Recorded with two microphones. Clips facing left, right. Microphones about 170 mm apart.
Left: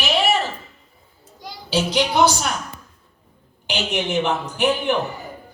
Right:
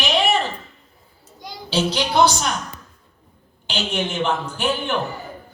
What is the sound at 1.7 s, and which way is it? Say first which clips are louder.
Speech: left 1 dB; 15° left (ahead or behind).